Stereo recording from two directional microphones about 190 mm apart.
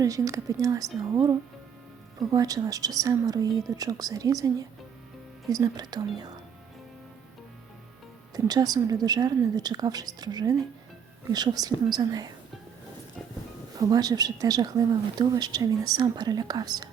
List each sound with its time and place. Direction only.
0.0 s a woman's voice: 20° right (ahead or behind)
8.4 s a woman's voice: 20° right (ahead or behind)
13.7 s a woman's voice: 20° right (ahead or behind)